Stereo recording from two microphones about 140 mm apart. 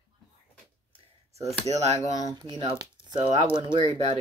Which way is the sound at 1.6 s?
55° right (ahead or behind).